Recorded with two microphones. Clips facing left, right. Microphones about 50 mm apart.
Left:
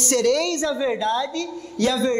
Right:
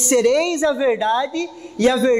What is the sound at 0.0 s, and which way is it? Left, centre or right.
A woman's voice, right.